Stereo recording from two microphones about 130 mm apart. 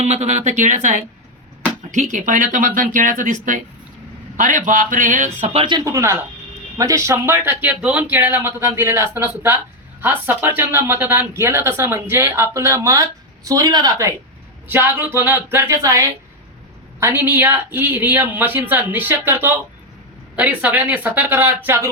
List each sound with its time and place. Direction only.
0.0 s speech: 60° right (ahead or behind); by 5.5 s 75° right (ahead or behind)
5.5 s speech: 35° right (ahead or behind)
14.7 s speech: 15° right (ahead or behind)